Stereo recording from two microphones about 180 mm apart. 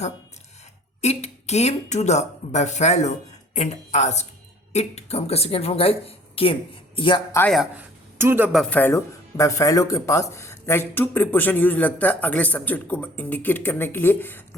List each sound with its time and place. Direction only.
1.0 s a woman's voice: 35° left (ahead or behind)
7.5 s a woman's voice: 5° right (ahead or behind)
8.2 s speech: 15° right (ahead or behind)
8.5 s speech: 5° left (ahead or behind)